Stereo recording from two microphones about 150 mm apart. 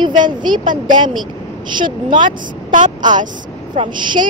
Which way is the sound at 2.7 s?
55° right (ahead or behind).